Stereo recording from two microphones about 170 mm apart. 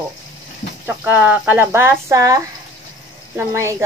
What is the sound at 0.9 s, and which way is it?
A woman's voice, 10° right (ahead or behind).